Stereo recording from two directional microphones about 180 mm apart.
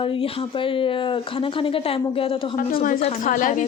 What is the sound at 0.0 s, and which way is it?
Speech, 30° left (ahead or behind).